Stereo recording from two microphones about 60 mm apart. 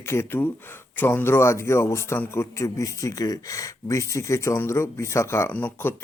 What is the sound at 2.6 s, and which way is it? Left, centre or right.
Speech, left.